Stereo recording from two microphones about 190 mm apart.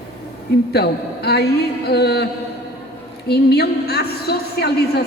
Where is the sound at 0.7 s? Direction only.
55° left (ahead or behind).